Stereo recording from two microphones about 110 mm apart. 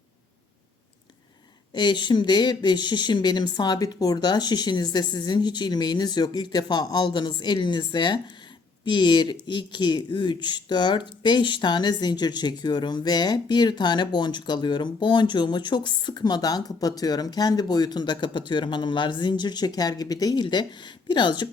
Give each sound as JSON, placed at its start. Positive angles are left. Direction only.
{"t": 1.7, "sound": "speech", "side_deg": 45}